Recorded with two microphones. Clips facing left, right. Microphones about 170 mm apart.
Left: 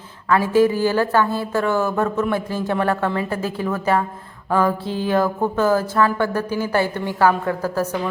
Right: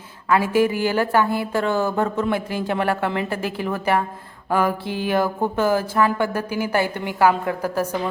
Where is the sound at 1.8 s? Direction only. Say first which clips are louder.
Left 1 dB; 30° right (ahead or behind).